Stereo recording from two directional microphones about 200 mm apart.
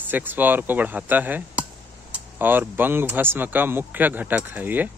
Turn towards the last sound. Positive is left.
turn(degrees=-10)  # may be behind; listen again after turning